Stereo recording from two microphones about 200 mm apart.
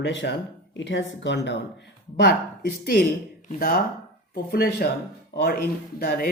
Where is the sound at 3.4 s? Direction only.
45° left (ahead or behind).